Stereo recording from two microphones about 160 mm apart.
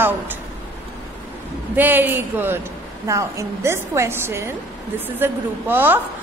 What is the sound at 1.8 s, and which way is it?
A woman's voice, 10° right (ahead or behind).